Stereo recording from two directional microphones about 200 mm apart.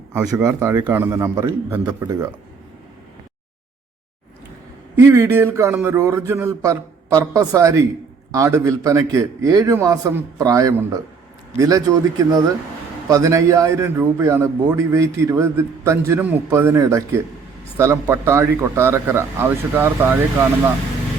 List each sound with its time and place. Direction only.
0.1 s a man's voice: 10° right (ahead or behind)
4.9 s a man's voice: 15° right (ahead or behind)